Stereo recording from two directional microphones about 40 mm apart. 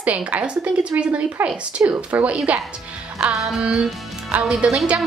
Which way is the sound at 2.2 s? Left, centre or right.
Right.